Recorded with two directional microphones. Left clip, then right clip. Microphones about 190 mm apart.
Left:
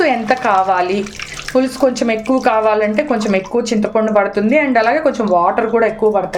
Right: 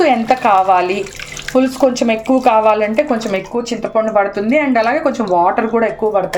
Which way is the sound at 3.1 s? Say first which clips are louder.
Left 2 dB; 20° left (ahead or behind).